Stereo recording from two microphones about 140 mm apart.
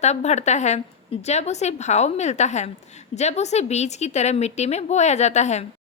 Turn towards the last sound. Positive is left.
turn(degrees=55)  # may be behind; listen again after turning